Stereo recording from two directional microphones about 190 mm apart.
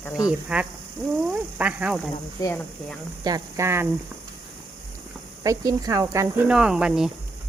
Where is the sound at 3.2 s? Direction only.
20° right (ahead or behind).